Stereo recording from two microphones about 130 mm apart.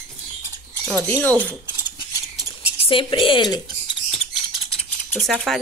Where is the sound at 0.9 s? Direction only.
15° left (ahead or behind).